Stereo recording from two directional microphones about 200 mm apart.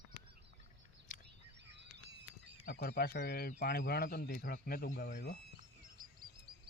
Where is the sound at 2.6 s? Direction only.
50° left (ahead or behind).